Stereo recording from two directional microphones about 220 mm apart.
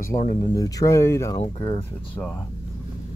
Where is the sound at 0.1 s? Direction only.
40° left (ahead or behind).